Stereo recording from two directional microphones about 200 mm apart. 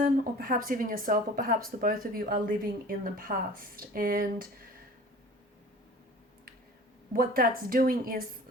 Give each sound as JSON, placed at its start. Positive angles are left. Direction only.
{"t": 0.0, "sound": "speech", "side_deg": -45}
{"t": 7.1, "sound": "speech", "side_deg": -45}